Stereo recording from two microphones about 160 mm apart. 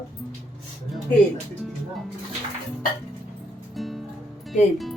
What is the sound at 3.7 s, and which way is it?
Music, centre (ahead or behind).